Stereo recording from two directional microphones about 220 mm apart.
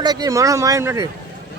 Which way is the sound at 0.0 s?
15° right (ahead or behind).